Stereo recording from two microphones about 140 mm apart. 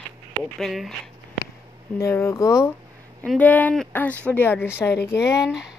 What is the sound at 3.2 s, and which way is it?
Speech, 10° left (ahead or behind).